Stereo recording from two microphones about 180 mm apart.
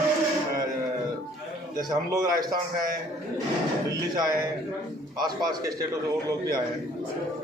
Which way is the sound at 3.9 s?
20° right (ahead or behind).